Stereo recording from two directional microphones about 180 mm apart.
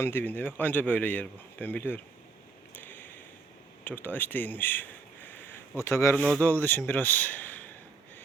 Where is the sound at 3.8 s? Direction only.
10° left (ahead or behind).